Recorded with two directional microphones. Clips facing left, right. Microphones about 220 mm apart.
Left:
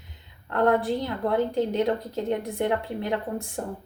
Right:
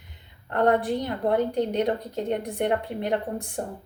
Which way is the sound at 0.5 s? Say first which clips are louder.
Even; 15° right (ahead or behind).